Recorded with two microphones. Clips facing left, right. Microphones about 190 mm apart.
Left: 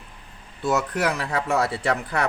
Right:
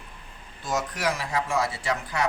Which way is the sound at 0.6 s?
65° left (ahead or behind).